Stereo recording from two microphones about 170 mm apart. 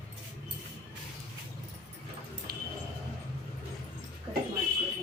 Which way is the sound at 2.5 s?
60° right (ahead or behind).